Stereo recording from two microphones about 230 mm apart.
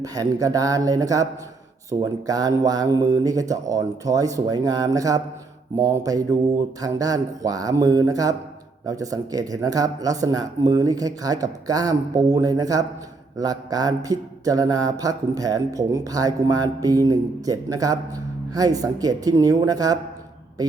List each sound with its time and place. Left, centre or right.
0.0 s mantra: centre